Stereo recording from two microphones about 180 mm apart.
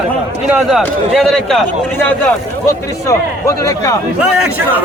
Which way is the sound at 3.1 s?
15° left (ahead or behind).